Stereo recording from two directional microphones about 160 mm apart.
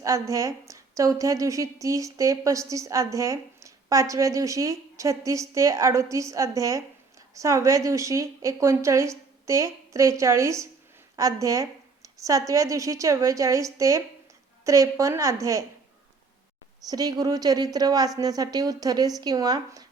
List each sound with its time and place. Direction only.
0.0 s a woman's voice: 20° right (ahead or behind)
16.9 s a woman's voice: 25° right (ahead or behind)